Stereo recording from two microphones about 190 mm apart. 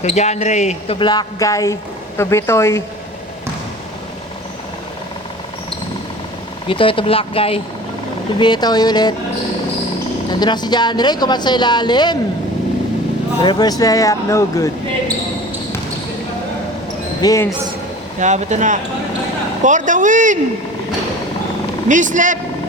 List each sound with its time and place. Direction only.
0.0 s speech: 35° left (ahead or behind); by 2.8 s 15° left (ahead or behind)
6.7 s speech: 25° left (ahead or behind)
10.4 s speech: 20° left (ahead or behind)
13.4 s speech: 20° left (ahead or behind)
17.2 s speech: 15° left (ahead or behind)
18.2 s speech: 40° right (ahead or behind)
21.8 s speech: 40° right (ahead or behind)